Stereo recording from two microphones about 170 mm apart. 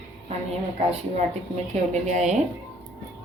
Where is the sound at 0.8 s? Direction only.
40° right (ahead or behind).